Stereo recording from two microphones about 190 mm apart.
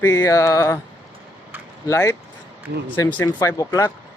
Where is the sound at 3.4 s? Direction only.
20° left (ahead or behind).